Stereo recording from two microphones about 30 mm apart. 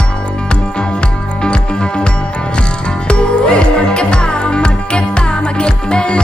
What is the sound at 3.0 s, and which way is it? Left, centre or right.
Music, left.